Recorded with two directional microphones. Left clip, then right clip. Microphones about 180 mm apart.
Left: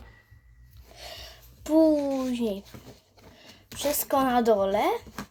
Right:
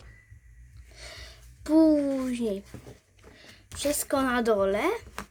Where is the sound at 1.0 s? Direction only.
35° right (ahead or behind).